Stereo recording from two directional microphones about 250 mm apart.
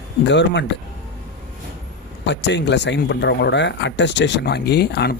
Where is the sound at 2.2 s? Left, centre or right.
Left.